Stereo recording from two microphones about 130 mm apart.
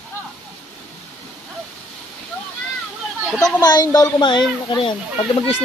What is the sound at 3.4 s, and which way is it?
Speech, 30° left (ahead or behind).